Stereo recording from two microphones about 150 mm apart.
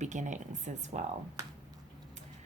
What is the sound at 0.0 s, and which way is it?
Speech, 55° right (ahead or behind).